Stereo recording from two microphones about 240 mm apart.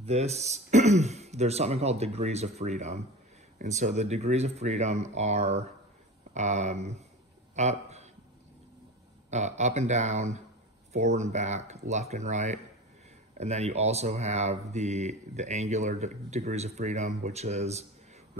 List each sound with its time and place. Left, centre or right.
0.0 s speech: right
7.5 s a sound: right
9.3 s speech: right